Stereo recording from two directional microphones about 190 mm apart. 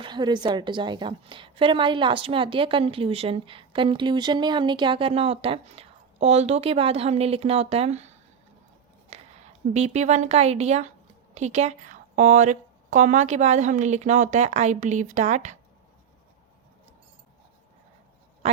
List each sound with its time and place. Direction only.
0.0 s a woman's voice: 25° right (ahead or behind)
9.1 s a sound: 35° right (ahead or behind)
9.7 s a woman's voice: 35° right (ahead or behind)